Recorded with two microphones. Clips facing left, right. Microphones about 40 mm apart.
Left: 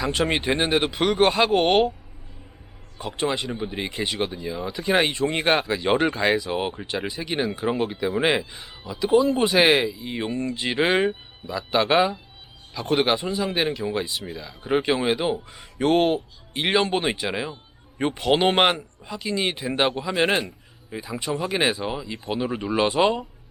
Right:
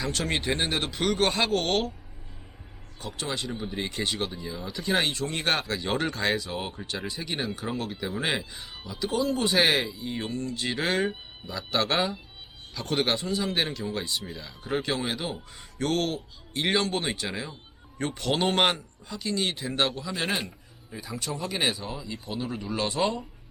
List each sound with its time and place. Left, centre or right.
0.0 s speech: centre
3.0 s speech: left
7.1 s speech: centre
8.2 s speech: centre
14.7 s speech: left